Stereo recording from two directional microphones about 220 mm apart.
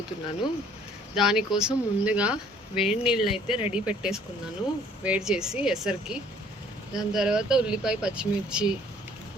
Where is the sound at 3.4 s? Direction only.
25° left (ahead or behind).